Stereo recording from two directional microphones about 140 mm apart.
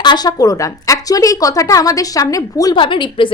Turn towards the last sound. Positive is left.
turn(degrees=35)  # may be behind; listen again after turning